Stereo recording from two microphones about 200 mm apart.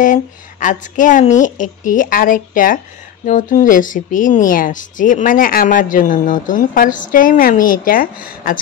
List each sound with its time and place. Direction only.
0.0 s speech: 40° left (ahead or behind)